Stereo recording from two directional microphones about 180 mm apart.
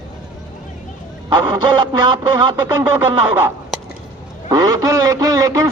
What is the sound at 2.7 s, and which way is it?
Speech, 10° right (ahead or behind).